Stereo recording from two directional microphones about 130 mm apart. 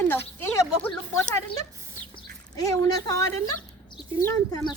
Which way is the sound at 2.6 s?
25° left (ahead or behind).